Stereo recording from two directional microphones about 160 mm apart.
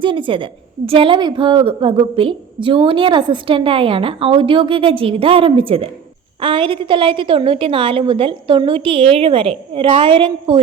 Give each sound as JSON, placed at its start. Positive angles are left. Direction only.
{"t": 0.0, "sound": "a woman's voice", "side_deg": -30}